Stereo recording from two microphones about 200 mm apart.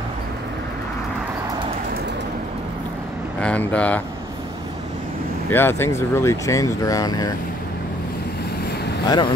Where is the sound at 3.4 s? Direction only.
5° left (ahead or behind).